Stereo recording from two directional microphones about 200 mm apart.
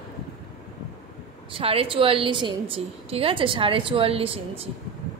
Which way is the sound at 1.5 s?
30° right (ahead or behind).